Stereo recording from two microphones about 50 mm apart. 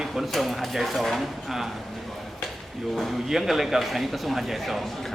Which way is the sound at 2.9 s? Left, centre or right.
Centre.